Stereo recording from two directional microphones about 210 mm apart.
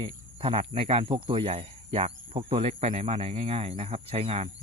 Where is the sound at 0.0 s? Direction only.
25° right (ahead or behind).